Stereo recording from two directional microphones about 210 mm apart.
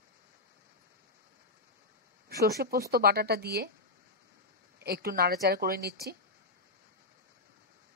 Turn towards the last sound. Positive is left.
turn(degrees=-50)  # may be behind; listen again after turning